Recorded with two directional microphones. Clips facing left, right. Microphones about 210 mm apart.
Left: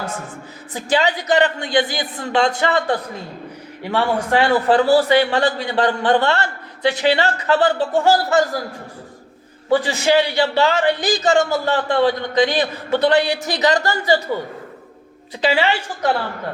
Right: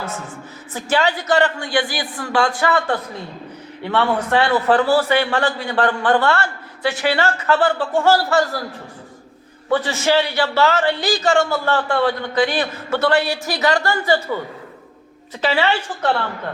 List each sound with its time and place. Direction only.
0.7 s a man's voice: 15° left (ahead or behind)
9.6 s a man's voice: 15° left (ahead or behind)
15.4 s a man's voice: 15° left (ahead or behind)